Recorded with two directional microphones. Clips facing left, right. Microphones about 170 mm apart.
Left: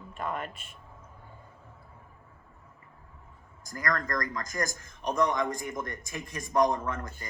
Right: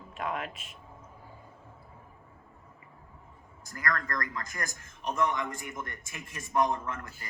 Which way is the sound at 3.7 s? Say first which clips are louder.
Left 2 dB; 40° left (ahead or behind).